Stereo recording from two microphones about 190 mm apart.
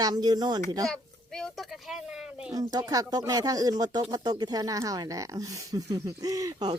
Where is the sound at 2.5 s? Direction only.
20° right (ahead or behind).